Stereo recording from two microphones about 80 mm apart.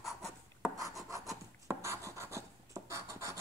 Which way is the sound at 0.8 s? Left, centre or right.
Right.